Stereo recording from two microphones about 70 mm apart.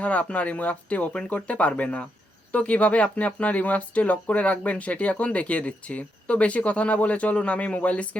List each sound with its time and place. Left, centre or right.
0.0 s speech: centre